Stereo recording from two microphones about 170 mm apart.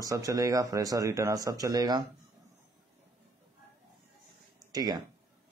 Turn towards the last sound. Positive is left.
turn(degrees=-20)  # may be behind; listen again after turning